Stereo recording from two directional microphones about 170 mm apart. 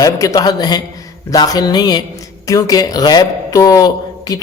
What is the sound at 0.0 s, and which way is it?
A man's voice, 20° left (ahead or behind).